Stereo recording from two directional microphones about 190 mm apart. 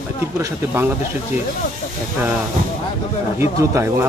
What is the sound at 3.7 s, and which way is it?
Speech, 15° right (ahead or behind).